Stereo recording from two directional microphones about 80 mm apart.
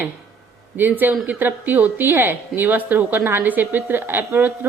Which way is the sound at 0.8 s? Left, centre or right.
Right.